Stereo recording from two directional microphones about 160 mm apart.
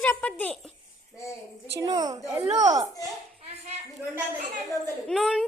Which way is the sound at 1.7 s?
25° right (ahead or behind).